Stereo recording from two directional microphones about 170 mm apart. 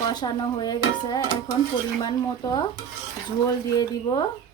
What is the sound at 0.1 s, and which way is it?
Speech, 25° left (ahead or behind).